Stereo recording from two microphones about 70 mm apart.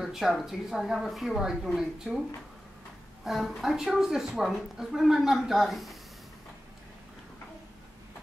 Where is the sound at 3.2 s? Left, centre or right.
Centre.